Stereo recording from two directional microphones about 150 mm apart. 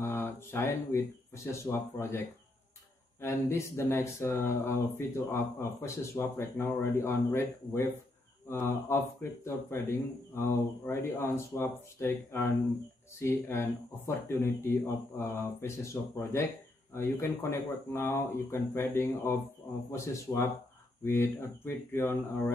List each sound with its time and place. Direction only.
0.0 s speech: 15° left (ahead or behind)